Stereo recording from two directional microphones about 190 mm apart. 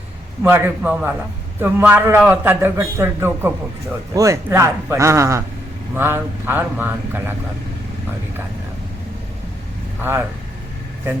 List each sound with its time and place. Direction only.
0.4 s a man's voice: 10° right (ahead or behind)
10.0 s a man's voice: 10° right (ahead or behind)